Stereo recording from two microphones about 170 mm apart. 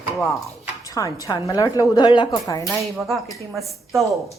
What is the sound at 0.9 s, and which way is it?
A woman's voice, 20° left (ahead or behind).